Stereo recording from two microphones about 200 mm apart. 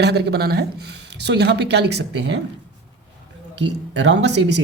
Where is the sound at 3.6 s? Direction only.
60° right (ahead or behind).